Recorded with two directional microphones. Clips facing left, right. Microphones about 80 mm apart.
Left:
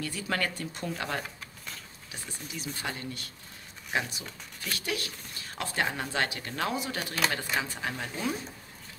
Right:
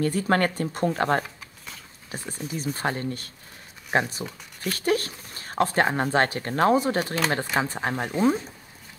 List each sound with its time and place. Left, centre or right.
0.0 s speech: right
1.2 s a sound: centre
2.0 s speech: right